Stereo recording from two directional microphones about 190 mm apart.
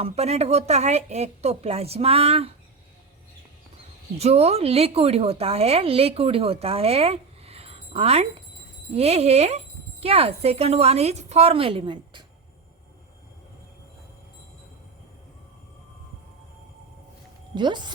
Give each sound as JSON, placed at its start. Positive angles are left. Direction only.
{"t": 0.0, "sound": "a woman's voice", "side_deg": -35}
{"t": 4.2, "sound": "a woman's voice", "side_deg": -35}
{"t": 17.5, "sound": "speech", "side_deg": -25}